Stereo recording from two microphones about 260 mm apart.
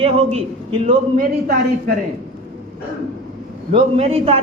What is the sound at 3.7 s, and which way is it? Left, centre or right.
Speech, right.